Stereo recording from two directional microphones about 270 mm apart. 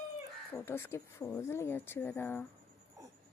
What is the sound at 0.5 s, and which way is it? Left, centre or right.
A woman's voice, centre.